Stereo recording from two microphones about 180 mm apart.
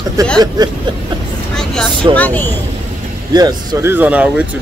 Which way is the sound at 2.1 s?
10° left (ahead or behind).